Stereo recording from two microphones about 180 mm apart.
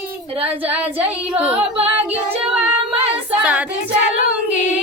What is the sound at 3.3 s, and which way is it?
Child singing, 5° right (ahead or behind).